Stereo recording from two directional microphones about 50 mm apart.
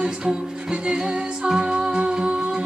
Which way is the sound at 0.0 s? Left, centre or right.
Centre.